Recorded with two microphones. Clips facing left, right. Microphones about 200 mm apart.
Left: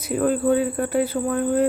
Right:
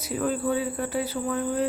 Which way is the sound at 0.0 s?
55° left (ahead or behind).